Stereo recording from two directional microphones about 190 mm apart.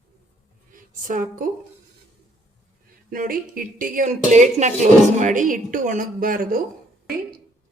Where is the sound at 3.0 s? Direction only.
45° right (ahead or behind).